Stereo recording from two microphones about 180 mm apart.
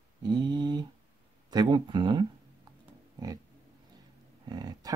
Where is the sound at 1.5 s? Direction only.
25° right (ahead or behind).